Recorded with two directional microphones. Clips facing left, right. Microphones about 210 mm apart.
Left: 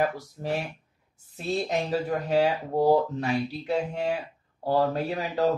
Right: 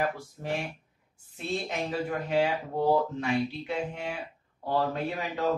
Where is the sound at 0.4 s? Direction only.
40° left (ahead or behind).